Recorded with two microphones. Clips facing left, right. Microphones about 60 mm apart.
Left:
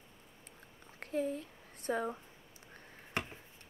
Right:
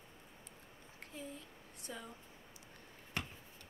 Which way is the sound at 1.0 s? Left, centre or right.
Left.